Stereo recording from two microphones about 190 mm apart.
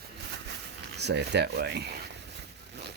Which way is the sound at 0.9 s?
60° right (ahead or behind).